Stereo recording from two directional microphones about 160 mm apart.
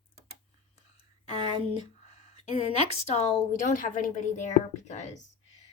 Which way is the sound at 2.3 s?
40° left (ahead or behind).